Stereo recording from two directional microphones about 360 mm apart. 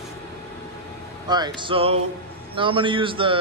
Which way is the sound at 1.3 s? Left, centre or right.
Centre.